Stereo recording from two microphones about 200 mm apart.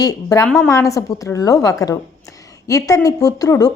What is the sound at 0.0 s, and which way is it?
Speech, 20° left (ahead or behind).